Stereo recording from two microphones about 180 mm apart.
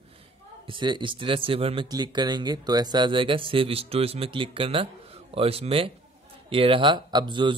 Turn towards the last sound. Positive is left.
turn(degrees=-25)  # may be behind; listen again after turning